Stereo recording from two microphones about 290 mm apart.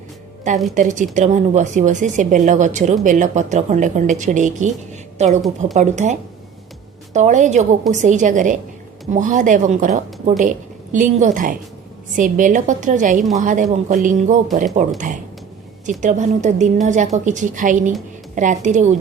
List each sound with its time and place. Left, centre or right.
0.7 s a woman's voice: right